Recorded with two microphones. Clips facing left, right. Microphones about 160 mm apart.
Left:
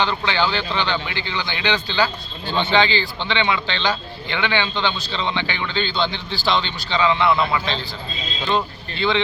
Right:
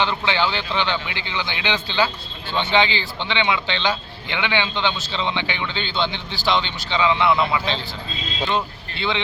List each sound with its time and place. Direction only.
0.0 s a man's voice: 20° right (ahead or behind)
9.0 s speech: 20° right (ahead or behind)